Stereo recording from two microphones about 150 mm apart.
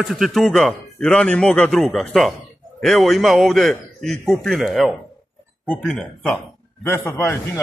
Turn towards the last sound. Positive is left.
turn(degrees=20)  # may be behind; listen again after turning